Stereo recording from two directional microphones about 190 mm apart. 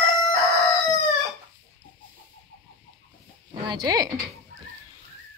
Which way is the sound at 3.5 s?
20° right (ahead or behind).